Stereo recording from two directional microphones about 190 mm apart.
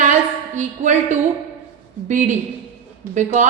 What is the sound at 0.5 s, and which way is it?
A woman's voice, 40° right (ahead or behind).